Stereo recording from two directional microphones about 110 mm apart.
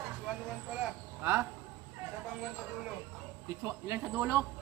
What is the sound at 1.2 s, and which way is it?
Speech, 20° right (ahead or behind).